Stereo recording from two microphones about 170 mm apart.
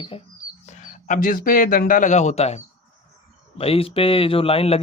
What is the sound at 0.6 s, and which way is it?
Speech, 45° left (ahead or behind).